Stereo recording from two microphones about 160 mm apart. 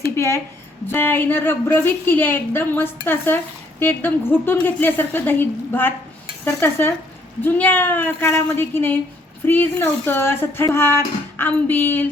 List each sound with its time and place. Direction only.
0.2 s a woman's voice: 15° left (ahead or behind)